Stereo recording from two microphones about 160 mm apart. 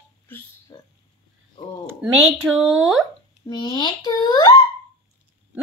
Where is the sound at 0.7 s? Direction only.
25° left (ahead or behind).